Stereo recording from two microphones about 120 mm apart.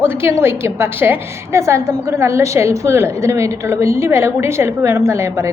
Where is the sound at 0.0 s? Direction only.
20° right (ahead or behind).